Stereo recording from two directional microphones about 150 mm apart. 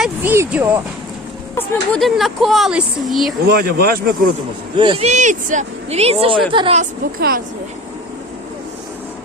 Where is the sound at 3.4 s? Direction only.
90° right.